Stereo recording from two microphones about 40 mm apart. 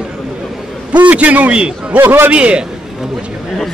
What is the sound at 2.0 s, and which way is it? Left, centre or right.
Speech, right.